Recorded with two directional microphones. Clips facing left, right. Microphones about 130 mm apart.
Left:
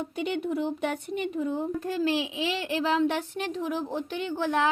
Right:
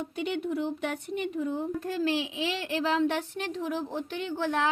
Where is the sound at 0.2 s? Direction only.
20° left (ahead or behind).